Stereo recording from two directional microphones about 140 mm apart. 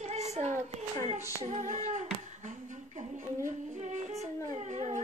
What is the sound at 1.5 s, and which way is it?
Humming, 55° right (ahead or behind).